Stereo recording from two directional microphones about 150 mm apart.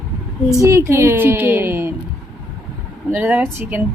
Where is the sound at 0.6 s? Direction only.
20° right (ahead or behind).